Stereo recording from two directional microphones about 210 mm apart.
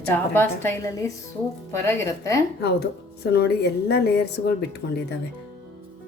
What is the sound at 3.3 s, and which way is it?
A woman's voice, 50° left (ahead or behind).